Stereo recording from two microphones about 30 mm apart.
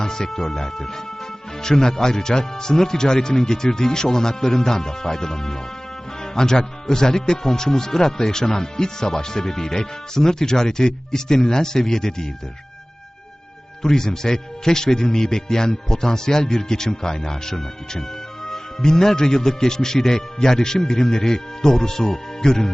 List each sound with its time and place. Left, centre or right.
0.0 s a man's voice: centre
13.8 s a man's voice: centre